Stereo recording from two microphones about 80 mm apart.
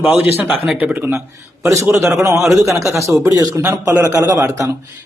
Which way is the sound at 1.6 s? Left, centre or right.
Right.